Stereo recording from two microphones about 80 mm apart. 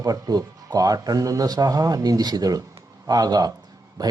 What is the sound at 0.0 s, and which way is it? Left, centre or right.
A man's voice, right.